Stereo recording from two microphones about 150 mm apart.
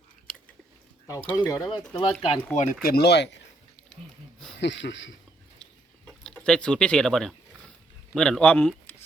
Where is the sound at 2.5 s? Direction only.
60° left (ahead or behind); by 3.1 s 85° left.